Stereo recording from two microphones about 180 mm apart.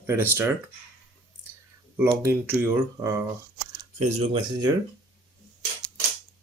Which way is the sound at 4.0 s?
40° right (ahead or behind).